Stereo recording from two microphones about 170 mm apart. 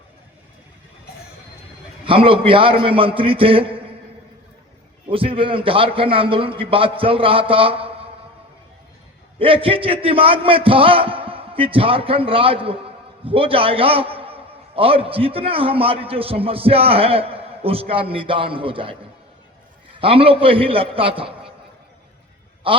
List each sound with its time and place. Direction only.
2.0 s a man's voice: 30° right (ahead or behind)
5.0 s a man's voice: 30° right (ahead or behind)
9.4 s a man's voice: 30° right (ahead or behind)
20.0 s a man's voice: 35° right (ahead or behind)
22.6 s a man's voice: 30° right (ahead or behind)